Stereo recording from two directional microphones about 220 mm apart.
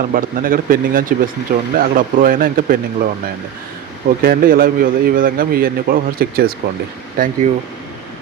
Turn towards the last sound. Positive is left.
turn(degrees=-40)  # may be behind; listen again after turning